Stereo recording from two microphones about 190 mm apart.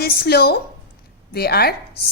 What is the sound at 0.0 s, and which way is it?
A woman's voice, 55° left (ahead or behind).